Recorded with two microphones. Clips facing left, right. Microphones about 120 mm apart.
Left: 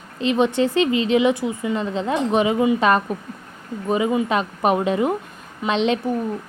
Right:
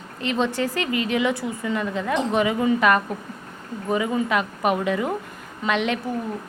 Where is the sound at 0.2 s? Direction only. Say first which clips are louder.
Left 5 dB; 20° left (ahead or behind).